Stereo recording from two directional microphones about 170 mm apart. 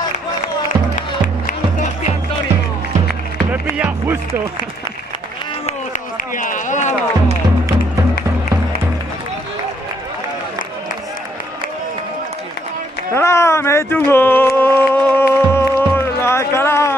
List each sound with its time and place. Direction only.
3.7 s music: 10° right (ahead or behind)
5.7 s run: 50° left (ahead or behind)
13.1 s a sound: 15° left (ahead or behind)
14.6 s music: 15° left (ahead or behind)